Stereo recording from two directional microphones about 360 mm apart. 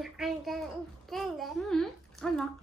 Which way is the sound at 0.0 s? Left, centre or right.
Centre.